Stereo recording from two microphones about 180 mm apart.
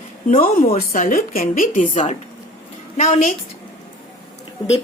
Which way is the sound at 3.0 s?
40° left (ahead or behind).